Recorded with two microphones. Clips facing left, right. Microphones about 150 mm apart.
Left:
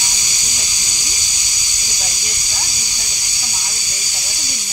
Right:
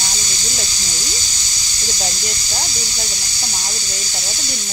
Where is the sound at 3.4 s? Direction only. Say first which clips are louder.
Right 4 dB; 15° left (ahead or behind).